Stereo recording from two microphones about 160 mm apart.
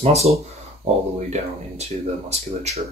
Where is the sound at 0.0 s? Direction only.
40° right (ahead or behind).